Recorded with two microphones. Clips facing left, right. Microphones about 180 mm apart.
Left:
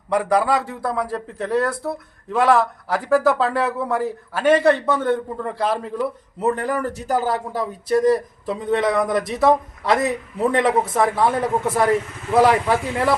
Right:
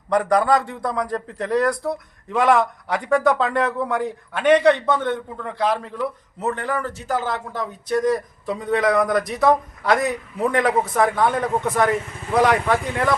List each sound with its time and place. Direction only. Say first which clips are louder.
0.1 s a man's voice: right 1 dB; 5° left (ahead or behind)
6.5 s speech: left 3 dB; 40° left (ahead or behind)
8.4 s a man's voice: even; centre (ahead or behind)